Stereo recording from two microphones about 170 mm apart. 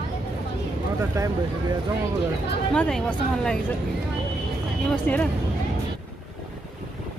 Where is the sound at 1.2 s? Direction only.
20° right (ahead or behind).